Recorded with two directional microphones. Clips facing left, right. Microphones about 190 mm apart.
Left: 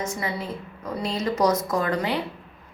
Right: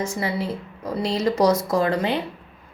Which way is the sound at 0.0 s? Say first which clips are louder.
Right 4 dB; 30° right (ahead or behind).